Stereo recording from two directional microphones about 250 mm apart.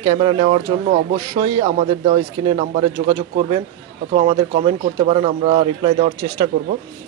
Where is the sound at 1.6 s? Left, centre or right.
Right.